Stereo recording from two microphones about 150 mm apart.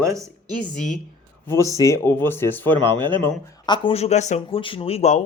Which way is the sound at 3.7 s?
35° left (ahead or behind).